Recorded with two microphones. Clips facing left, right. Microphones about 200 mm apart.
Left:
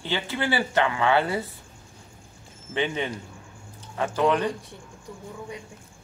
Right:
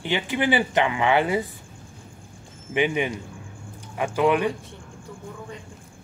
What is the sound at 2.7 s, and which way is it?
Speech, 15° right (ahead or behind).